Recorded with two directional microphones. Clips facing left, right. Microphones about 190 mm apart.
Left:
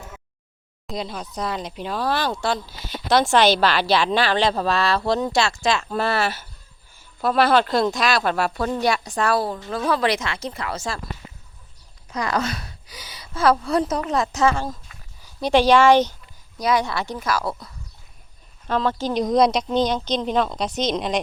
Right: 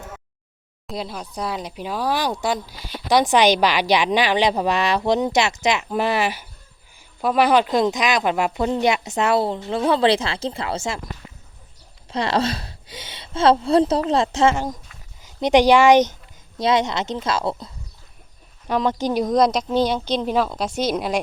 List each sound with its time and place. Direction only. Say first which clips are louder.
0.9 s speech: even; 5° right (ahead or behind); by 11.1 s 20° right (ahead or behind)
12.1 s speech: right 3 dB; 30° right (ahead or behind)
18.7 s speech: right 2 dB; 15° right (ahead or behind)
19.2 s speech: left 1 dB; centre (ahead or behind)